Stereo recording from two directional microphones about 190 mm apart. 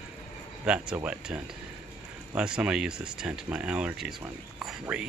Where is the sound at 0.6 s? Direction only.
5° right (ahead or behind).